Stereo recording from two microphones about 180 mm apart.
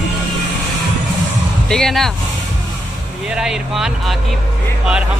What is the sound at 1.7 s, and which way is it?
Speech, centre (ahead or behind).